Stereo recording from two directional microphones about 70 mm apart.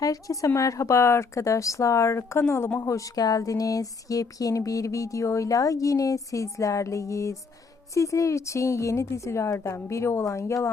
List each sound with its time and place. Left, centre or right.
0.0 s speech: left
2.8 s speech: left